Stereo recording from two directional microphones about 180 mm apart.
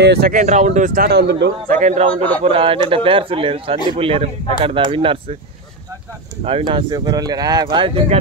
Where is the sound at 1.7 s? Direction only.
40° right (ahead or behind).